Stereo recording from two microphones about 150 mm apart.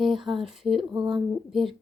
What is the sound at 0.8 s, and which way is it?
Speech, 35° right (ahead or behind).